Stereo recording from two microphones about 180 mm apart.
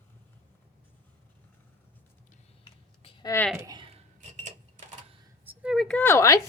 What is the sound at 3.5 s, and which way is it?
Cutlery, 20° right (ahead or behind).